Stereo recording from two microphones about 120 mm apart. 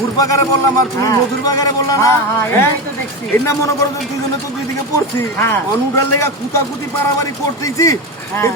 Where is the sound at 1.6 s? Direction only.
25° left (ahead or behind).